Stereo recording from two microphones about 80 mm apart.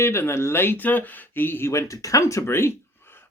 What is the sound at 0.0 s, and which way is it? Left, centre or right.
Speech, left.